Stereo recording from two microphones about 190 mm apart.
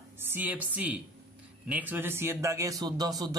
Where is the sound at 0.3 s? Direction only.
10° right (ahead or behind).